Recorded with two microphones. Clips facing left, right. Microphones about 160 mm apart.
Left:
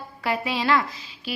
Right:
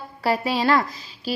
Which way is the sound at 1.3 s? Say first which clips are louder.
Right 5 dB; 35° right (ahead or behind).